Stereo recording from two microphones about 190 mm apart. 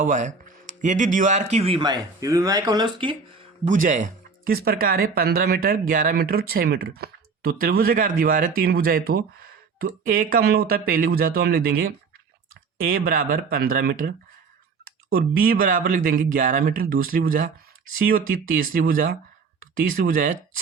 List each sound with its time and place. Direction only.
0.0 s a man's voice: 40° right (ahead or behind); by 3.2 s 25° right (ahead or behind)
3.7 s speech: 45° right (ahead or behind)
15.1 s speech: 50° right (ahead or behind)